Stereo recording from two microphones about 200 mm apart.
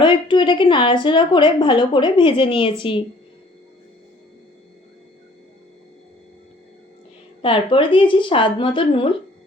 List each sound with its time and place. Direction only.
0.0 s a woman's voice: 25° left (ahead or behind)
7.4 s a woman's voice: 25° left (ahead or behind)